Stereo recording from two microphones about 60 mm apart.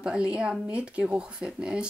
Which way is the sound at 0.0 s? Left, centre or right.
Centre.